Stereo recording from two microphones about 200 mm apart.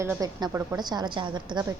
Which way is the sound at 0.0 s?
15° right (ahead or behind).